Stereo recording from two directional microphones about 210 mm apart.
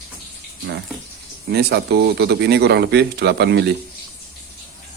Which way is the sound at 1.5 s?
50° right (ahead or behind).